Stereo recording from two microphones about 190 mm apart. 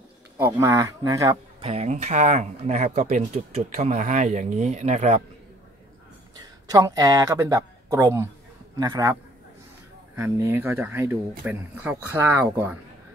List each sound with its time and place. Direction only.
0.6 s speech: 15° right (ahead or behind)
1.6 s speech: 35° right (ahead or behind)
6.7 s a man's voice: 20° right (ahead or behind)
10.1 s speech: 10° right (ahead or behind)